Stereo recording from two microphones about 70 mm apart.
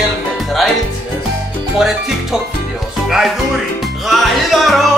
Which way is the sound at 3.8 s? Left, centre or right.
Centre.